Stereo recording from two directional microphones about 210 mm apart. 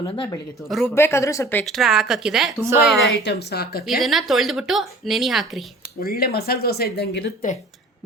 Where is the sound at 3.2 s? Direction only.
50° left (ahead or behind).